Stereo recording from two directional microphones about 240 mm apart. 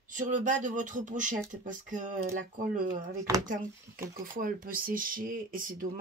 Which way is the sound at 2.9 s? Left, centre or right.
Centre.